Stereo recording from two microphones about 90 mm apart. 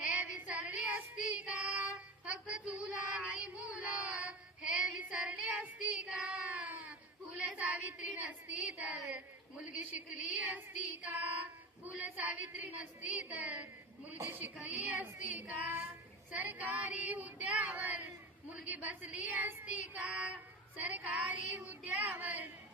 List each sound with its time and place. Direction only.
0.0 s child singing: 15° right (ahead or behind)
7.3 s a woman's voice: 15° right (ahead or behind)